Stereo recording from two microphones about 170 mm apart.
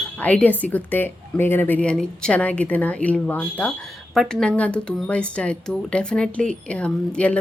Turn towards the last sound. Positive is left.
turn(degrees=5)  # may be behind; listen again after turning